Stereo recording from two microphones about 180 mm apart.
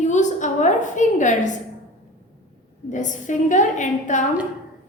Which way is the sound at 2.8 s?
45° left (ahead or behind).